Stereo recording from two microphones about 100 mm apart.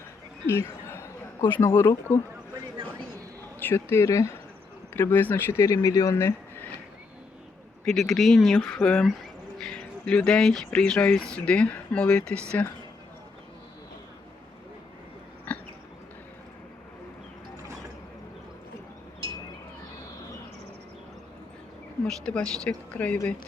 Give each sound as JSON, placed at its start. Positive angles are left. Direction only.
{"t": 0.4, "sound": "a sound", "side_deg": 25}
{"t": 1.5, "sound": "speech", "side_deg": 25}
{"t": 3.6, "sound": "speech", "side_deg": 20}
{"t": 4.9, "sound": "speech", "side_deg": 20}
{"t": 7.9, "sound": "speech", "side_deg": 0}
{"t": 15.5, "sound": "a sound", "side_deg": 15}
{"t": 22.0, "sound": "speech", "side_deg": 10}